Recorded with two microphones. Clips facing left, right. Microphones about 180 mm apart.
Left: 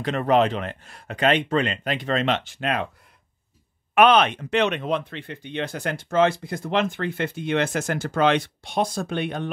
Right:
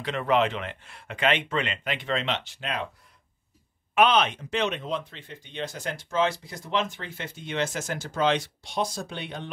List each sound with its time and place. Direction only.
0.0 s speech: 45° left (ahead or behind)
3.9 s speech: 60° left (ahead or behind)